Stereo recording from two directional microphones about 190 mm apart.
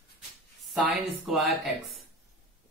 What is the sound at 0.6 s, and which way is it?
Speech, centre (ahead or behind).